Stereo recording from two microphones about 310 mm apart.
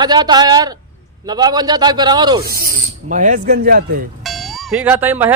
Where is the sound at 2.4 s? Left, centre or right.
Right.